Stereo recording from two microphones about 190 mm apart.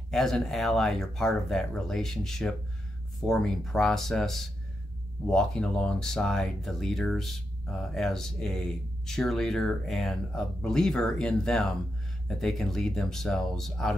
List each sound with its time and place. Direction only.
0.1 s speech: centre (ahead or behind)